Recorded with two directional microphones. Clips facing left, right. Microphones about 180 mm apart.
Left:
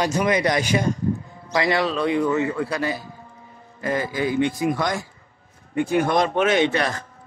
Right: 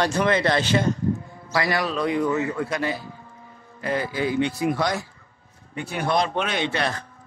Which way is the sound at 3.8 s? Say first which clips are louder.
Left 1 dB; 45° left (ahead or behind).